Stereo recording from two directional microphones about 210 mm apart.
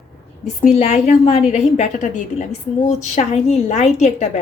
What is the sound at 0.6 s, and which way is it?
A woman's voice, 30° left (ahead or behind).